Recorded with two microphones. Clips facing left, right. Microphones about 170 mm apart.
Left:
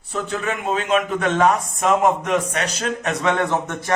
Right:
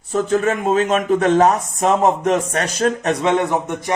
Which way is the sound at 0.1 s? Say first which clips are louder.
Right 7 dB; 40° right (ahead or behind).